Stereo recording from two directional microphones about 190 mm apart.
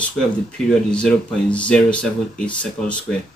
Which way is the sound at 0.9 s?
5° left (ahead or behind).